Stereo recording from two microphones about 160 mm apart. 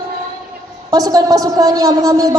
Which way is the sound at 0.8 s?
25° right (ahead or behind).